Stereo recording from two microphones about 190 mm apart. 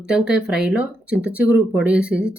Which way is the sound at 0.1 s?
5° right (ahead or behind).